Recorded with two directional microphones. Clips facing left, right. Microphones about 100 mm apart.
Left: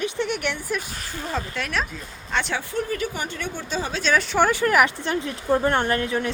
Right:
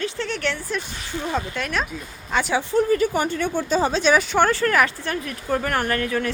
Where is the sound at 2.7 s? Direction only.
40° right (ahead or behind).